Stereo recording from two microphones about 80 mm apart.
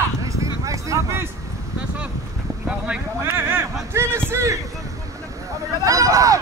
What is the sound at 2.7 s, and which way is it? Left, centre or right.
Boat, centre.